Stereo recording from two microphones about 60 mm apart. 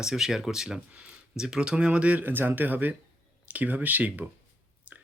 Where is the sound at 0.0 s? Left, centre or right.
Centre.